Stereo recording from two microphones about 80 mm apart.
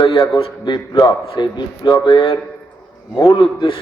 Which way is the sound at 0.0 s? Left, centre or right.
Left.